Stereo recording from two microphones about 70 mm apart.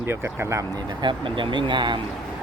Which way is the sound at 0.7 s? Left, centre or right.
Right.